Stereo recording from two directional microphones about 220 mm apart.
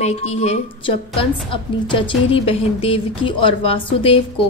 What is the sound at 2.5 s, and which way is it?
Speech, 25° left (ahead or behind).